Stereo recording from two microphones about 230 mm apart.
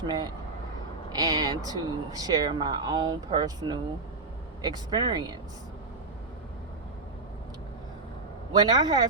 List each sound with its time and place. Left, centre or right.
0.0 s speech: centre
8.5 s speech: centre